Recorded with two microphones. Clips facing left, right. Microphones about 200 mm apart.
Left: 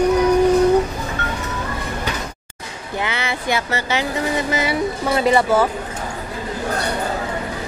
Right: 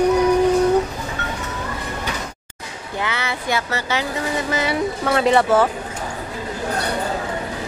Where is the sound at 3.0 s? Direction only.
20° left (ahead or behind).